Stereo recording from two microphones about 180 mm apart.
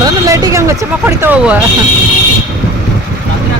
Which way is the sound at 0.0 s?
20° right (ahead or behind).